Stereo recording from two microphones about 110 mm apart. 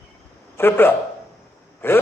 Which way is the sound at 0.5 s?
20° left (ahead or behind).